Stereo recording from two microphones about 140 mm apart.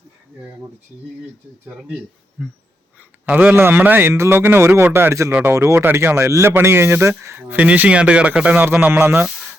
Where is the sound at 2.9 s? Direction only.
10° right (ahead or behind).